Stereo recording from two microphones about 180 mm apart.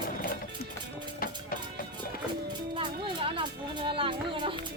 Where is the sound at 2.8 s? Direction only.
30° right (ahead or behind).